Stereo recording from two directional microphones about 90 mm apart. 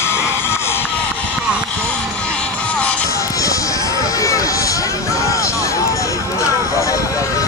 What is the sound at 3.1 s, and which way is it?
Music, 40° left (ahead or behind).